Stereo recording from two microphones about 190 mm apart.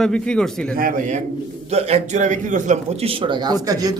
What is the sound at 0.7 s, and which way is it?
A man's voice, 50° right (ahead or behind).